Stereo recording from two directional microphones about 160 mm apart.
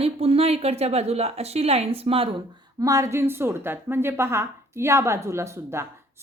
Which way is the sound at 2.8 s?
20° right (ahead or behind).